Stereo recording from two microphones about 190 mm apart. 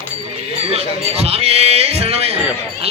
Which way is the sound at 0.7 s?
35° right (ahead or behind).